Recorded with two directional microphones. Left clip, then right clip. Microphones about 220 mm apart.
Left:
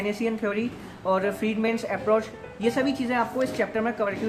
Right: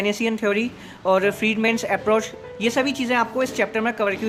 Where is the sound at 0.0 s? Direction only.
40° right (ahead or behind).